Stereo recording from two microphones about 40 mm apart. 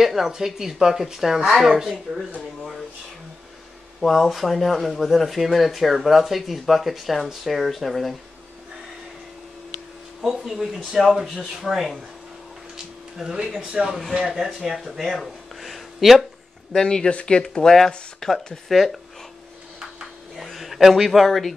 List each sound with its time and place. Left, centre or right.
0.0 s speech: centre
4.0 s speech: centre
10.2 s speech: centre
12.7 s music: centre
13.7 s speech: right
14.1 s speech: centre
14.8 s a sound: centre
16.7 s speech: left
18.7 s speech: centre
20.3 s speech: centre